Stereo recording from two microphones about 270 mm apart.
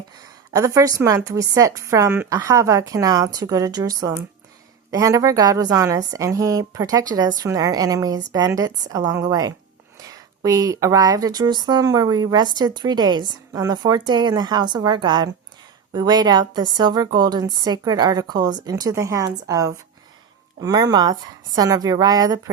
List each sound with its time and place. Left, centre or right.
0.2 s speech: centre